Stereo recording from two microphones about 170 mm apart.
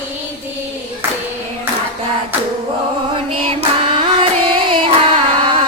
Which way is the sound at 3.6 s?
30° right (ahead or behind).